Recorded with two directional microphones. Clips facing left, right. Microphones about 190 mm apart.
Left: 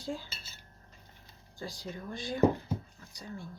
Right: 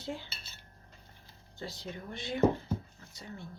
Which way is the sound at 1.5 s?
25° right (ahead or behind).